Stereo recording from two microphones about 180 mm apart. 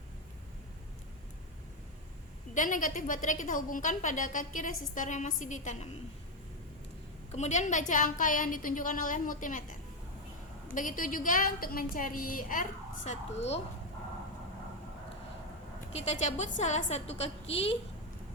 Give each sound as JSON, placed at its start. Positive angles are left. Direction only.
{"t": 2.6, "sound": "a woman's voice", "side_deg": 45}
{"t": 7.3, "sound": "a woman's voice", "side_deg": 40}
{"t": 10.7, "sound": "a woman's voice", "side_deg": 45}
{"t": 15.9, "sound": "a woman's voice", "side_deg": 35}